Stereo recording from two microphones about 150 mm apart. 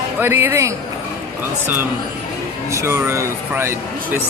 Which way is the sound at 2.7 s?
20° right (ahead or behind).